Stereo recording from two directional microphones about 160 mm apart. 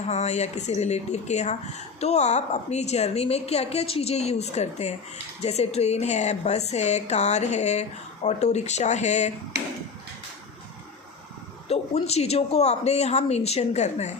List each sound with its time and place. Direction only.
0.1 s speech: 45° left (ahead or behind)
9.5 s a sound: 90° right
11.7 s speech: 40° left (ahead or behind)